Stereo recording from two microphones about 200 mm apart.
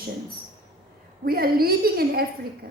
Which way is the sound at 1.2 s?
50° right (ahead or behind).